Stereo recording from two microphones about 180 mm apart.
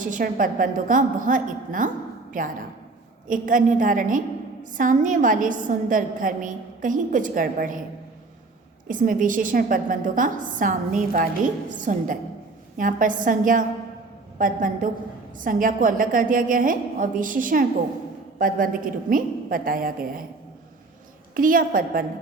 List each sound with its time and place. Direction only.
0.0 s a woman's voice: 50° right (ahead or behind)
8.9 s a woman's voice: 50° right (ahead or behind)
21.3 s a woman's voice: 50° right (ahead or behind)